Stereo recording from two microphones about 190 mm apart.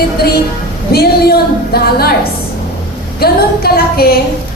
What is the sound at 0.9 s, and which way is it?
A woman's voice, 55° left (ahead or behind).